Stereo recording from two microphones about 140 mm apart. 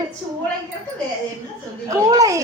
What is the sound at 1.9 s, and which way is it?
Speech, 25° right (ahead or behind).